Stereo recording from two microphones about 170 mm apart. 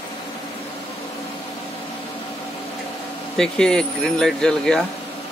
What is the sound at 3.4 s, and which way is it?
Speech, 5° left (ahead or behind).